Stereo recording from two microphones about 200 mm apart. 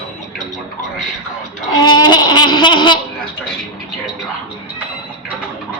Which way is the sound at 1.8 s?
20° left (ahead or behind).